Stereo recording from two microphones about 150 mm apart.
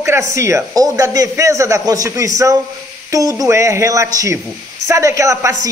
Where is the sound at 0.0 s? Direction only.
20° right (ahead or behind).